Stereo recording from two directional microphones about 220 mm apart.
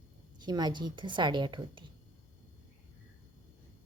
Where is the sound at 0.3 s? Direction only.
20° right (ahead or behind).